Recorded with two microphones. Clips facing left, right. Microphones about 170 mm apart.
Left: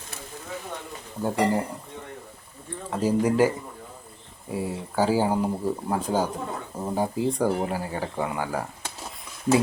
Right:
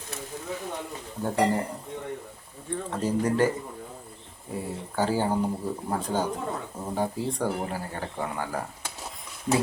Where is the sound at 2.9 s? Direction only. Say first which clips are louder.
Left 4 dB; 10° left (ahead or behind).